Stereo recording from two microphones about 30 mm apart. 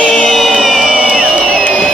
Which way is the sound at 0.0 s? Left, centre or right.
Centre.